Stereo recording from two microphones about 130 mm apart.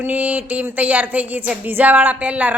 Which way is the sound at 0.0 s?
10° right (ahead or behind).